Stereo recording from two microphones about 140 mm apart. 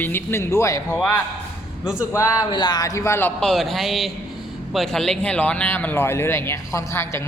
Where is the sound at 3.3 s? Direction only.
Centre (ahead or behind); by 7.2 s 20° left (ahead or behind).